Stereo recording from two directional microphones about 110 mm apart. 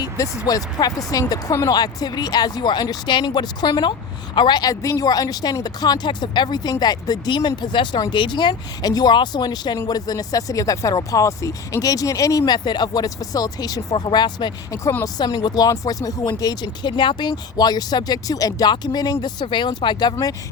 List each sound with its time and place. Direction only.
0.0 s speech: 30° left (ahead or behind)